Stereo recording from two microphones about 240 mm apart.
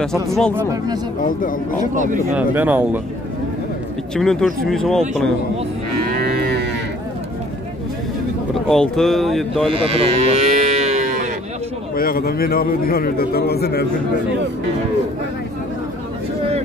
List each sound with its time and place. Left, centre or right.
0.0 s speech: centre
0.6 s speech: centre
1.2 s a man's voice: left
2.3 s speech: centre
4.1 s speech: centre
6.2 s livestock: right
8.5 s speech: centre
9.7 s livestock: right
12.0 s a man's voice: left